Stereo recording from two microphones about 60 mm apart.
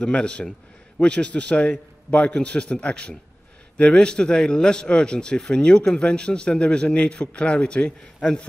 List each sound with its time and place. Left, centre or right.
0.0 s a man's voice: centre